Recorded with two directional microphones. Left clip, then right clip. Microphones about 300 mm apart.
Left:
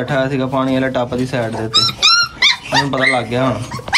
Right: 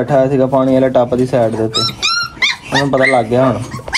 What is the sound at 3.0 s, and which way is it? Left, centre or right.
Speech, centre.